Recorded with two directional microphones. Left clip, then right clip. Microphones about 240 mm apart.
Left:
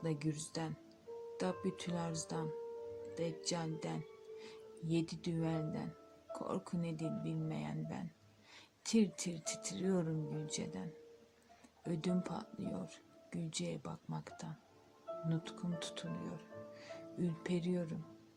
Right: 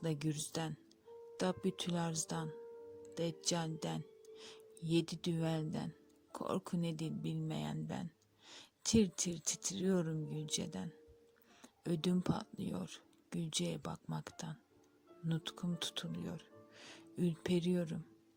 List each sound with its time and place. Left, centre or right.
0.0 s speech: right